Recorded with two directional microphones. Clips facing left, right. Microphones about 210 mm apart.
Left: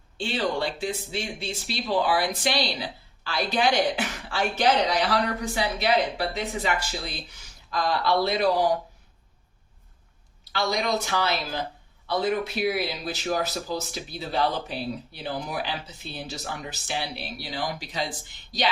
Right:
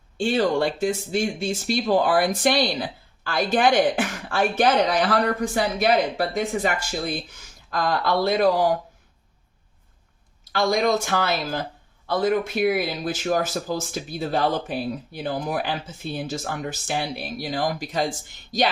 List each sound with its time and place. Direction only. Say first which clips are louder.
0.2 s speech: right 6 dB; 50° right (ahead or behind)
10.5 s speech: right 5 dB; 50° right (ahead or behind)